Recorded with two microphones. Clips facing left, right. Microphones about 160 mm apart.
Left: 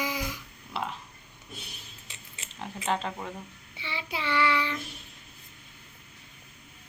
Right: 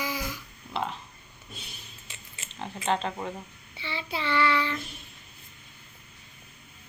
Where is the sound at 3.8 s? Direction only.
15° left (ahead or behind).